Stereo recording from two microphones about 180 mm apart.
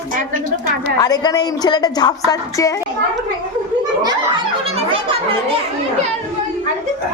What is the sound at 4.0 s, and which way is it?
Speech, 25° right (ahead or behind).